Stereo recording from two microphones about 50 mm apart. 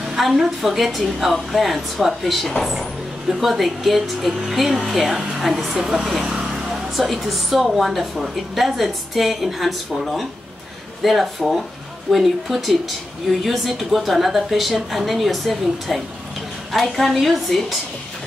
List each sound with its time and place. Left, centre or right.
0.0 s speech: centre
6.2 s vehicle: centre
6.7 s speech: centre